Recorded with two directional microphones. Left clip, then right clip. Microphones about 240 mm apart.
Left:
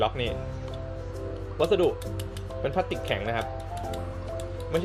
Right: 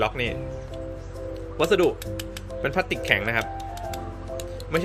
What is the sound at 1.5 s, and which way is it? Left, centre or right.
Speech, right.